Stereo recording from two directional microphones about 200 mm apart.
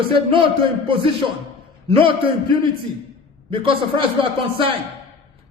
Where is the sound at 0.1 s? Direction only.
25° right (ahead or behind).